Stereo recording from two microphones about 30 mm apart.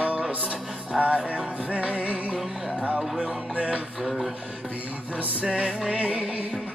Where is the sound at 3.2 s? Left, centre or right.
Right.